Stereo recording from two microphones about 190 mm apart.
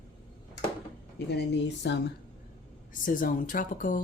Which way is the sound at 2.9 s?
45° left (ahead or behind).